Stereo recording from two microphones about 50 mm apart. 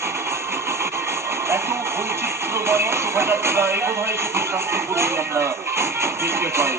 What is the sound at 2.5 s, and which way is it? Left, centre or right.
Music, right.